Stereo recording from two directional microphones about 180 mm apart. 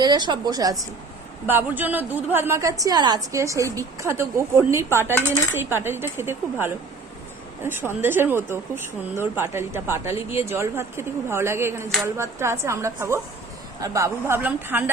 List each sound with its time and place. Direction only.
0.0 s a woman's voice: 25° right (ahead or behind)